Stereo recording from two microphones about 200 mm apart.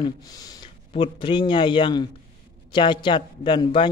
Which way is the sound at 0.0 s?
20° left (ahead or behind).